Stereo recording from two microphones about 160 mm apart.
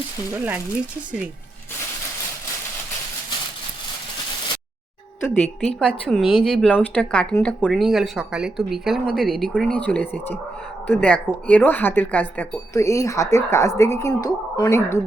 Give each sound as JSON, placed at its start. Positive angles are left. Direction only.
{"t": 0.3, "sound": "speech", "side_deg": -10}
{"t": 5.3, "sound": "speech", "side_deg": 5}